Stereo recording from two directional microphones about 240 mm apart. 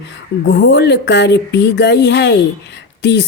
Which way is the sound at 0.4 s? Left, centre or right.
Left.